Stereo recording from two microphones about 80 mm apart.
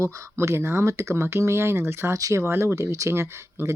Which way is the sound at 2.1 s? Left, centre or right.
Right.